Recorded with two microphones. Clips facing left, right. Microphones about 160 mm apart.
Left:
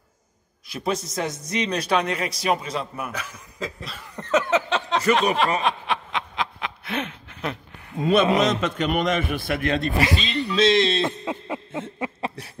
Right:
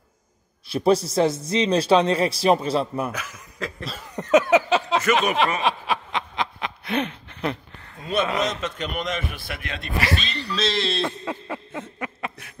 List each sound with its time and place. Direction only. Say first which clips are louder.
0.7 s a man's voice: right 8 dB; 35° right (ahead or behind)
3.1 s a man's voice: right 1 dB; 5° right (ahead or behind)
3.8 s a sound: right 4 dB; 15° right (ahead or behind)
5.6 s snicker: right 1 dB; centre (ahead or behind)
8.0 s a man's voice: left 5 dB; 70° left (ahead or behind); by 9.8 s 45° left (ahead or behind)
10.0 s speech: left 2 dB; 20° left (ahead or behind)